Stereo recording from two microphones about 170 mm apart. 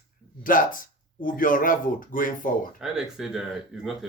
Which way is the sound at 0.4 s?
55° left (ahead or behind).